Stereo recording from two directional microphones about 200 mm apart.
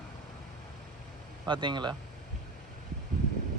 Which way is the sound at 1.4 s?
25° right (ahead or behind).